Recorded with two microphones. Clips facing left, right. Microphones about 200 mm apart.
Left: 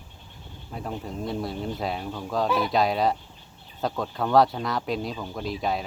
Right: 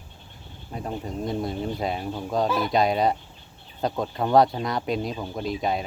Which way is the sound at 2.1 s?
20° right (ahead or behind).